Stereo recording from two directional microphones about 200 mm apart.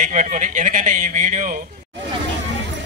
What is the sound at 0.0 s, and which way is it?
Speech, 40° right (ahead or behind).